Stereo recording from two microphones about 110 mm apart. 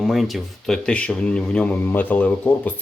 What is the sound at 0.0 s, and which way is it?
Speech, centre (ahead or behind).